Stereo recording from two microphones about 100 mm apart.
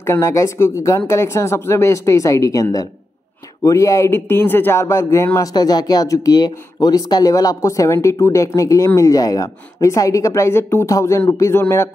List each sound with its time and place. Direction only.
0.0 s a man's voice: 30° left (ahead or behind)